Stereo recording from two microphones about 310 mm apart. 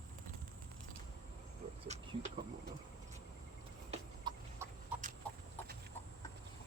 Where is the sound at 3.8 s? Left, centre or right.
Centre.